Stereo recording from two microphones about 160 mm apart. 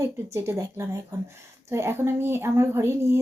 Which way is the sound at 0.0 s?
20° right (ahead or behind).